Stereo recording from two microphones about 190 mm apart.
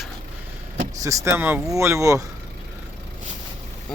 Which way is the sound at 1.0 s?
15° right (ahead or behind).